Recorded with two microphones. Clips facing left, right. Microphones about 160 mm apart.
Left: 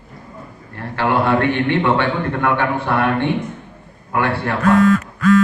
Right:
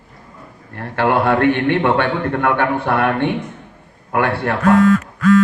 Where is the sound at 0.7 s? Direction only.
60° right (ahead or behind).